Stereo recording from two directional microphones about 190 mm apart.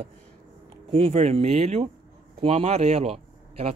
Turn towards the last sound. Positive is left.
turn(degrees=-30)  # may be behind; listen again after turning